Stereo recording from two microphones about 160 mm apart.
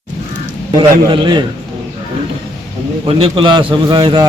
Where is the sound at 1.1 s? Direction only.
30° right (ahead or behind).